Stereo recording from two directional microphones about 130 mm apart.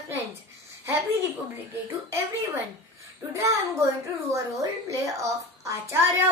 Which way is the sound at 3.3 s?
25° right (ahead or behind).